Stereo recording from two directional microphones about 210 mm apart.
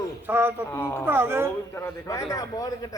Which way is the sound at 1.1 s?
10° right (ahead or behind).